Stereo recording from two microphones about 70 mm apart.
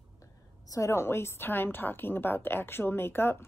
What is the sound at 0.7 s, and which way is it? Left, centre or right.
A woman's voice, left.